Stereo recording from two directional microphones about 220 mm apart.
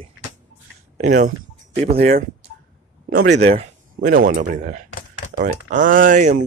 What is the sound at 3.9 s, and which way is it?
Speech, 35° right (ahead or behind).